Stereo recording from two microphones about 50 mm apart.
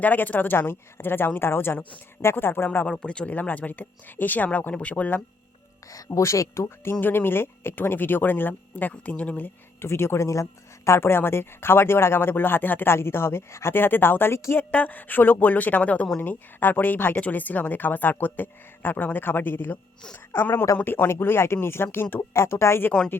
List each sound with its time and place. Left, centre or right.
0.0 s speech: left
2.9 s speech: centre
3.3 s speech: left
6.1 s speech: left
7.0 s speech: left
8.9 s speech: left
9.8 s speech: left
10.4 s speech: left
12.9 s speech: left
13.7 s speech: left
14.5 s speech: left